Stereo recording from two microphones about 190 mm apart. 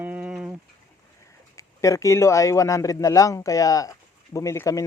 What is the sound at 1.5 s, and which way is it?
A man's voice, 15° left (ahead or behind).